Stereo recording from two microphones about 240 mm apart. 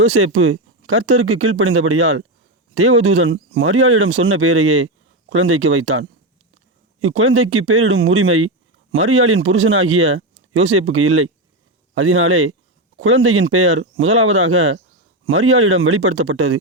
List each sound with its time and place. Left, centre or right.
0.0 s speech: right